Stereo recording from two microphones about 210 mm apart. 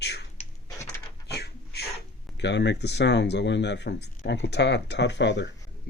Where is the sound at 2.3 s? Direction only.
55° left (ahead or behind).